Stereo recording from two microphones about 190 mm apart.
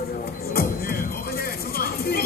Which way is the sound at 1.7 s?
50° left (ahead or behind).